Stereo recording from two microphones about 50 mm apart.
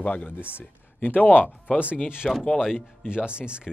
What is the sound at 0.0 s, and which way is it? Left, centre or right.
Speech, left.